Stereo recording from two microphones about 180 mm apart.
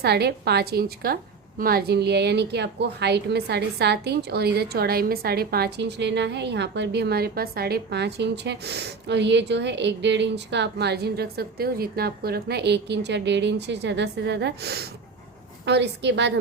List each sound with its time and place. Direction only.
0.0 s a woman's voice: 65° right (ahead or behind)